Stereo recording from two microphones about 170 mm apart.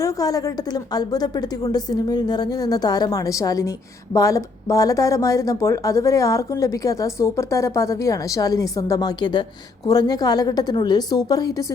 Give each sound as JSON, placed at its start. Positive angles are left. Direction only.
{"t": 0.0, "sound": "speech", "side_deg": 20}